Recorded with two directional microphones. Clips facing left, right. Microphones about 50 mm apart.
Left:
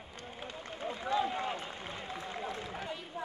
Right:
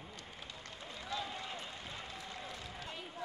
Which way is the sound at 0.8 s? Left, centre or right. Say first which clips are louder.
Left 10 dB; left.